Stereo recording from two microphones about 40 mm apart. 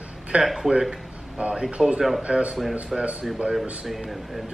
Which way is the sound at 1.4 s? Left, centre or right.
Right.